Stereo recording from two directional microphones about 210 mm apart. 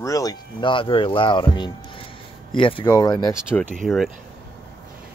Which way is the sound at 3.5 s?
5° left (ahead or behind).